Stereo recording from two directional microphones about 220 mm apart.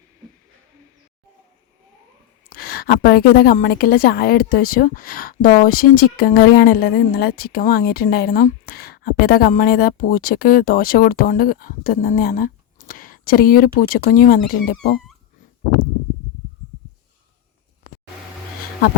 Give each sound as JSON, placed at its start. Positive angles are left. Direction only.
{"t": 2.5, "sound": "a woman's voice", "side_deg": 45}